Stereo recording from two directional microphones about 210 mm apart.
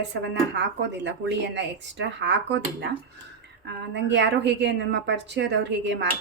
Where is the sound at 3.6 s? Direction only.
55° right (ahead or behind).